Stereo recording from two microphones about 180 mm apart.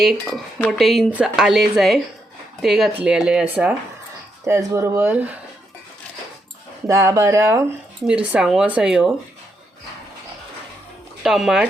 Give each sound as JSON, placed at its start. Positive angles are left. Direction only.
{"t": 0.0, "sound": "speech", "side_deg": 0}
{"t": 6.8, "sound": "speech", "side_deg": -15}
{"t": 11.2, "sound": "speech", "side_deg": 0}